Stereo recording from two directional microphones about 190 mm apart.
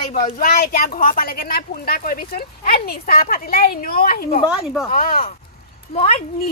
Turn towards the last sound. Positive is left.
turn(degrees=35)  # may be behind; listen again after turning